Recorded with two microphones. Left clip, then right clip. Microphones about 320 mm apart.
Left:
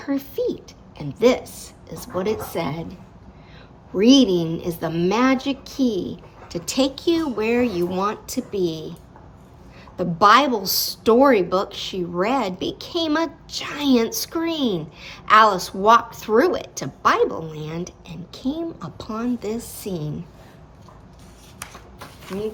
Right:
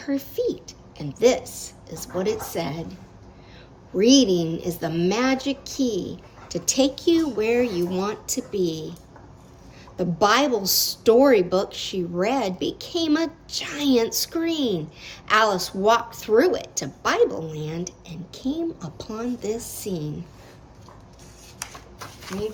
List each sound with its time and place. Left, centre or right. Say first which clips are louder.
0.0 s speech: left 1 dB; centre
3.9 s speech: left 2 dB; centre
10.0 s speech: left 5 dB; centre